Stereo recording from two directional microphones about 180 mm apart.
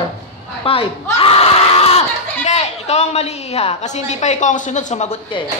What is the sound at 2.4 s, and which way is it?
A woman's voice, 35° left (ahead or behind).